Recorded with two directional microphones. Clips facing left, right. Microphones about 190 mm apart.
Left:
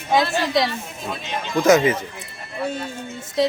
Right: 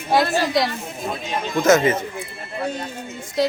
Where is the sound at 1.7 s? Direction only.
15° left (ahead or behind).